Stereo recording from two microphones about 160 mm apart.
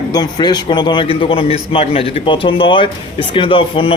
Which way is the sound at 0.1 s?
25° left (ahead or behind).